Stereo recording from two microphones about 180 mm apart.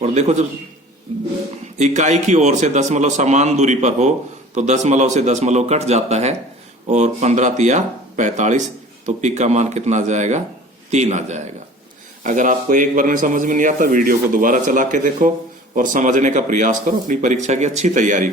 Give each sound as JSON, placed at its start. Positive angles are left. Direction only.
{"t": 0.0, "sound": "a man's voice", "side_deg": -40}